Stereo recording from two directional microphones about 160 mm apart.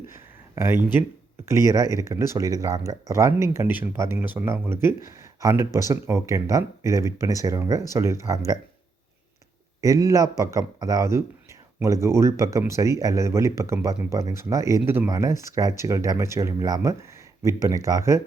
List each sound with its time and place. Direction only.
0.1 s a sound: 15° right (ahead or behind)
1.5 s speech: 20° right (ahead or behind)
9.8 s speech: 20° right (ahead or behind)